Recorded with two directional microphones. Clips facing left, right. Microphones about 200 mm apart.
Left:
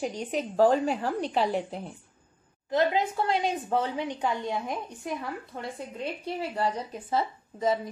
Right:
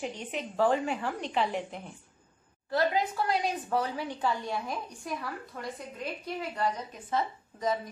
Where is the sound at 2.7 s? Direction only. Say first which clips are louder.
Left 3 dB; 20° left (ahead or behind).